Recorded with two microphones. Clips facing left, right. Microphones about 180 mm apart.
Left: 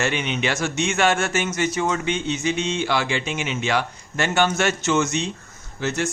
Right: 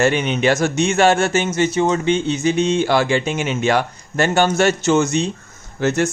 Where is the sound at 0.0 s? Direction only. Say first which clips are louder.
Right 7 dB; 40° right (ahead or behind).